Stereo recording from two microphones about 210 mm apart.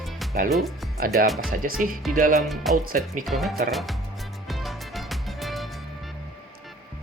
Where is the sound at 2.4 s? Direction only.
Centre (ahead or behind).